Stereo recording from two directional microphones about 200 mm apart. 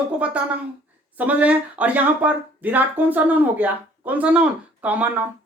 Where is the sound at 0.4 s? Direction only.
5° right (ahead or behind).